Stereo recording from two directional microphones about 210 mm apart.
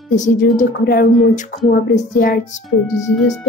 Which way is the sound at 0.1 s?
35° left (ahead or behind).